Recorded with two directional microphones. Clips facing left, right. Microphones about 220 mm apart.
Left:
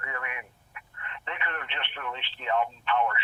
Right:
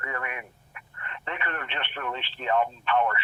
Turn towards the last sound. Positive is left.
turn(degrees=-40)  # may be behind; listen again after turning